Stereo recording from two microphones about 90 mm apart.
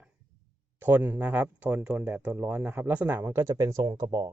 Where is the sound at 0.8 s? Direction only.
20° right (ahead or behind).